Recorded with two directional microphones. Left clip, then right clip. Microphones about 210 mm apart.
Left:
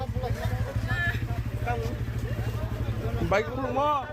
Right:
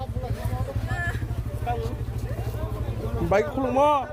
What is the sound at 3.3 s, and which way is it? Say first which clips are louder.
Speech: right 4 dB; 40° right (ahead or behind).